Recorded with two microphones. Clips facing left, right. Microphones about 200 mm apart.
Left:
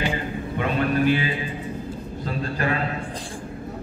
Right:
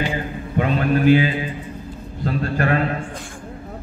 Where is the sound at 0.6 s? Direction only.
50° right (ahead or behind).